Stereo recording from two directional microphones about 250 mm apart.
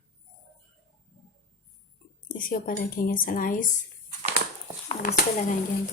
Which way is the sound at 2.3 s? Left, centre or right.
Left.